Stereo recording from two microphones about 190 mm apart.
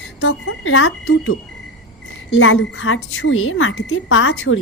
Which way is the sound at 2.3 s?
90° left.